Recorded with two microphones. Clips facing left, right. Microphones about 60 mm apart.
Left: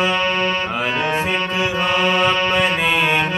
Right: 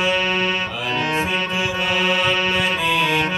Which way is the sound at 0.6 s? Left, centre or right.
Left.